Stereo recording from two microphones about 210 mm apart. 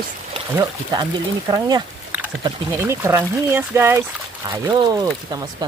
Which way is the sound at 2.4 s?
15° right (ahead or behind).